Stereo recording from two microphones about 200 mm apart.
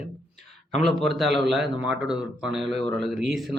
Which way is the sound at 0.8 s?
Centre (ahead or behind).